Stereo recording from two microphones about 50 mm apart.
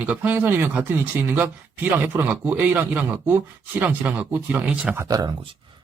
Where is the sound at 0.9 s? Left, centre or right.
Right.